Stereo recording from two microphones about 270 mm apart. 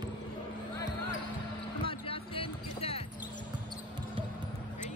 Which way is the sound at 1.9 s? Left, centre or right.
Centre.